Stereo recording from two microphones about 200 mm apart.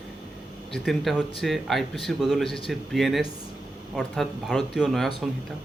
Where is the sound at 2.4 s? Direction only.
25° left (ahead or behind).